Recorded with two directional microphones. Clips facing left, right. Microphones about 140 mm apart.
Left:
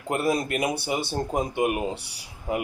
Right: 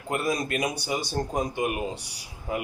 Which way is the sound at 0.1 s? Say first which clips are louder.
Left 3 dB; 30° left (ahead or behind).